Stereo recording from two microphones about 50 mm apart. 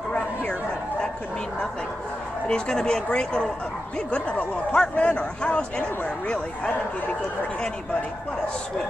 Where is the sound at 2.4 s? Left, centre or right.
Centre.